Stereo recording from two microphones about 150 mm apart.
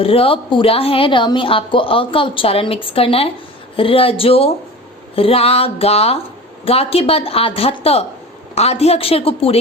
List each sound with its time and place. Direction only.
0.0 s a woman's voice: 40° left (ahead or behind)